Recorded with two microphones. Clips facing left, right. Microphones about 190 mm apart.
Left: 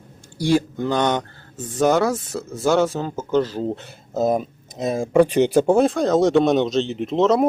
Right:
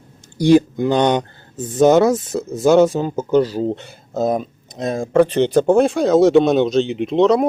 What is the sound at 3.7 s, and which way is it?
Speech, centre (ahead or behind).